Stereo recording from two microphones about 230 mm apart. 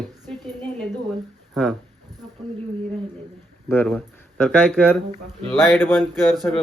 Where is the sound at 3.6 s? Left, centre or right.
Centre.